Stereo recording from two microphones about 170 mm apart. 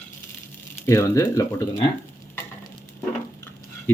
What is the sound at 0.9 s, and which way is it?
Speech, 15° left (ahead or behind).